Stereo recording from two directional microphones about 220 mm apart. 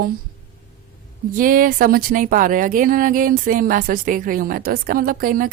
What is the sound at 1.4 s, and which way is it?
Speech, 40° right (ahead or behind).